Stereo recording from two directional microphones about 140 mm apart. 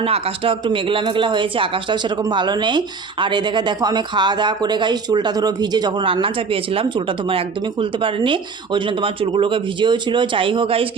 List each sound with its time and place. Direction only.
0.0 s speech: 40° right (ahead or behind)